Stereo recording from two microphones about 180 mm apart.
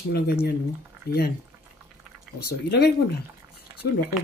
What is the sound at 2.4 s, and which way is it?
Speech, 60° left (ahead or behind).